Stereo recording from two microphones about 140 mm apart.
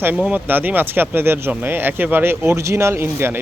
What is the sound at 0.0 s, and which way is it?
Speech, 10° right (ahead or behind).